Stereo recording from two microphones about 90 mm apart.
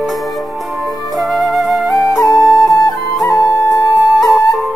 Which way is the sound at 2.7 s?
40° left (ahead or behind).